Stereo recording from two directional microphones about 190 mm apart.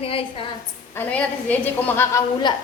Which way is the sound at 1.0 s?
5° left (ahead or behind).